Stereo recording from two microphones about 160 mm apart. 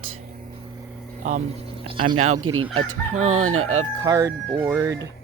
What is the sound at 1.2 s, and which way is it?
Speech, 55° right (ahead or behind).